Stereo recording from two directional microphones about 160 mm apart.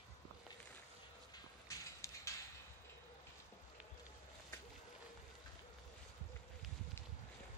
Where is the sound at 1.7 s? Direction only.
20° left (ahead or behind).